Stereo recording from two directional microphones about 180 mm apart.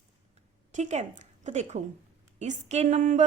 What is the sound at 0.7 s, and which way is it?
A woman's voice, 40° right (ahead or behind).